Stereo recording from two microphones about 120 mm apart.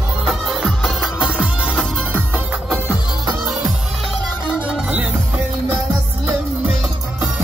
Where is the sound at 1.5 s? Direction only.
10° left (ahead or behind).